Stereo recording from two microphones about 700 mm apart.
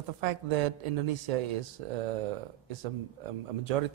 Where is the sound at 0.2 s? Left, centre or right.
Right.